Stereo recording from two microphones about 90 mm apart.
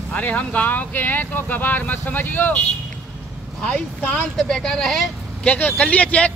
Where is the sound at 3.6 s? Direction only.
15° left (ahead or behind).